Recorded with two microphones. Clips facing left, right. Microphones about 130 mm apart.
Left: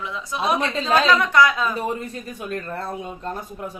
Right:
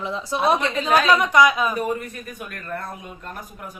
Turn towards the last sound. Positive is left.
turn(degrees=30)  # may be behind; listen again after turning